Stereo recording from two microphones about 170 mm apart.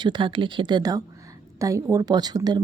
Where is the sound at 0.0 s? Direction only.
30° right (ahead or behind).